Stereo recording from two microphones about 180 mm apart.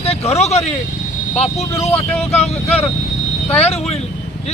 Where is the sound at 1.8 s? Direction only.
35° left (ahead or behind).